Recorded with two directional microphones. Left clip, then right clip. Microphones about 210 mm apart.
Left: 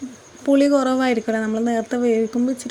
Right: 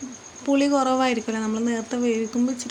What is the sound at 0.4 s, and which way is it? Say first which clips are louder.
Speech: left 4 dB; 20° left (ahead or behind).